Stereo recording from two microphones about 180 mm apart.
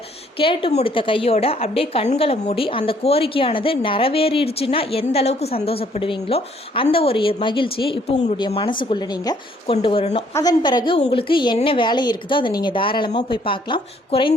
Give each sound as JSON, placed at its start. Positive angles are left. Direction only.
{"t": 0.3, "sound": "a woman's voice", "side_deg": 30}